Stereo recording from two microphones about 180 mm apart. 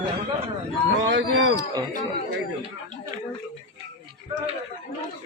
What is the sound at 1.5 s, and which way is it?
Speech, 20° right (ahead or behind).